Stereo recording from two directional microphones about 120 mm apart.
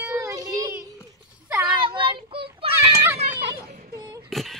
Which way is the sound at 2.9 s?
20° right (ahead or behind).